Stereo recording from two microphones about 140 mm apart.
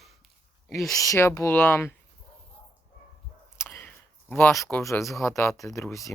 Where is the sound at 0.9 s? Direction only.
25° left (ahead or behind).